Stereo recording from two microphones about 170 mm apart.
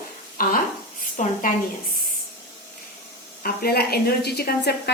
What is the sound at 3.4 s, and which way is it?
A woman's voice, 65° left (ahead or behind).